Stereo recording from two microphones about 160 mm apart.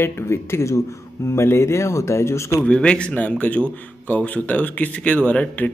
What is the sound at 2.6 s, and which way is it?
Speech, 5° left (ahead or behind).